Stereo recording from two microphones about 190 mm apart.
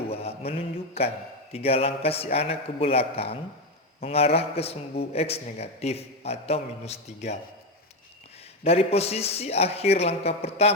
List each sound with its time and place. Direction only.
0.1 s mantra: 30° left (ahead or behind)
1.5 s a man's voice: 30° left (ahead or behind)
8.6 s a man's voice: 30° left (ahead or behind)